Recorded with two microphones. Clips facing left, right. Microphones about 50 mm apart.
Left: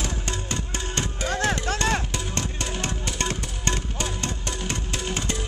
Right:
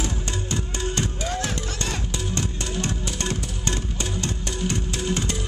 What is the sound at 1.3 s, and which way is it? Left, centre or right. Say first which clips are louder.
Music: left 4 dB; left.